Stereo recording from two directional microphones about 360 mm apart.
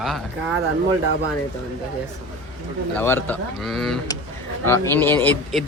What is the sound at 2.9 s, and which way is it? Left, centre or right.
Speech, centre.